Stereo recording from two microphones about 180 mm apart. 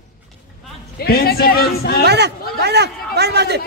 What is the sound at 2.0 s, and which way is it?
A man's voice, 65° right (ahead or behind).